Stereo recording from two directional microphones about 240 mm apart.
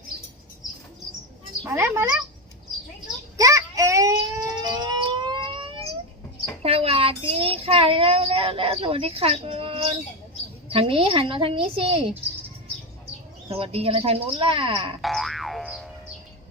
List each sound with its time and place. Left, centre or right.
1.6 s a woman's voice: centre
3.3 s baby cry: centre
6.6 s a child's voice: right
13.5 s a child's voice: right
15.0 s boing: centre